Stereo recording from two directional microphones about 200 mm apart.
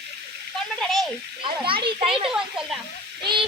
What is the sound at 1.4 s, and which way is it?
Speech, 25° right (ahead or behind).